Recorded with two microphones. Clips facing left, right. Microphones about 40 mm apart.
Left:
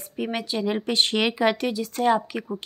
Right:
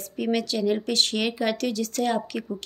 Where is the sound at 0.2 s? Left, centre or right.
Centre.